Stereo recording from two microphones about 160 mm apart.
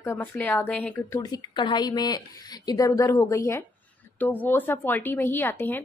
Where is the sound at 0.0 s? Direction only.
15° left (ahead or behind).